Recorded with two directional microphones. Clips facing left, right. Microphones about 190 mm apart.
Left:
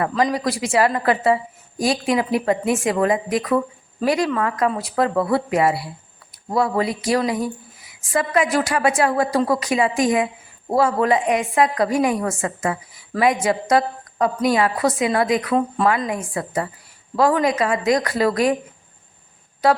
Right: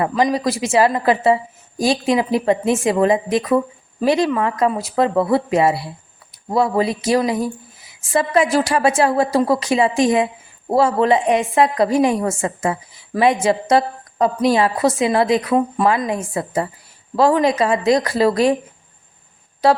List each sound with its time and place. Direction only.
0.2 s a woman's voice: 25° right (ahead or behind)